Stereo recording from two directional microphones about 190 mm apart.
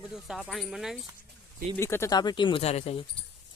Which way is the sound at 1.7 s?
15° left (ahead or behind).